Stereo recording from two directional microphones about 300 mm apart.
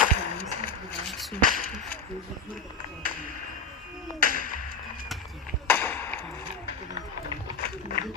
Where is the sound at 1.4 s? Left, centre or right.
Right.